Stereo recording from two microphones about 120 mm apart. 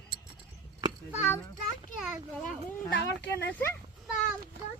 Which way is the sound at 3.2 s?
15° left (ahead or behind).